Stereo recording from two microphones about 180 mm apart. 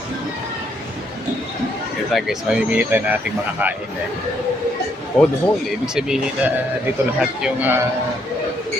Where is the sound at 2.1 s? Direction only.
Centre (ahead or behind).